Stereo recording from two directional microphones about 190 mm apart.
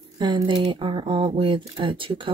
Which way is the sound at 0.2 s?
25° right (ahead or behind).